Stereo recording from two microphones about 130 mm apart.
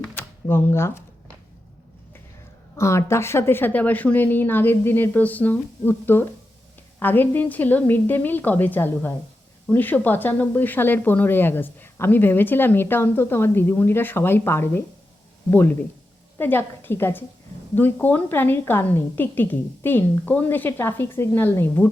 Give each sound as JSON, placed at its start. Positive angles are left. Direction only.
{"t": 0.1, "sound": "speech", "side_deg": 15}
{"t": 2.7, "sound": "speech", "side_deg": 20}